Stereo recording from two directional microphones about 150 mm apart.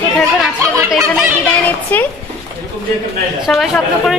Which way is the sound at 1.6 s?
10° left (ahead or behind).